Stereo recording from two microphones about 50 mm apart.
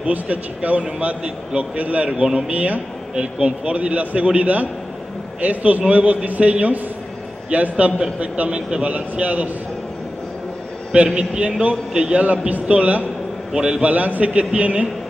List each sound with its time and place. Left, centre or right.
0.0 s a man's voice: right
11.1 s speech: right
13.5 s a man's voice: centre
13.8 s speech: right